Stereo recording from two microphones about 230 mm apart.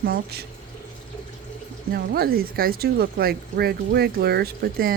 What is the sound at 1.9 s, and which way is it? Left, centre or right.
Speech, right.